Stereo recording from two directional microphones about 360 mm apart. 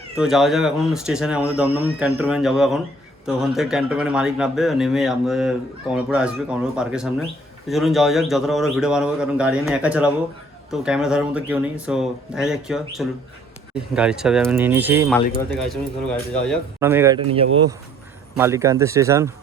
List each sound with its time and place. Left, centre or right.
0.2 s a man's voice: centre
18.3 s speech: centre